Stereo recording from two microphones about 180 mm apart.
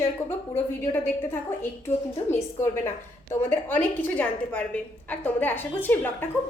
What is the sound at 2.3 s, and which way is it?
A woman's voice, 15° left (ahead or behind).